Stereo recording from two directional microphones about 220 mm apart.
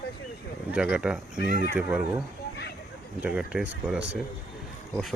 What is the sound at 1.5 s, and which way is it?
Speech, 45° left (ahead or behind).